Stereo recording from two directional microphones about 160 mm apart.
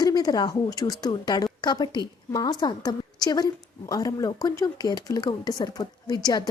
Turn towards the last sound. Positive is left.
turn(degrees=25)  # may be behind; listen again after turning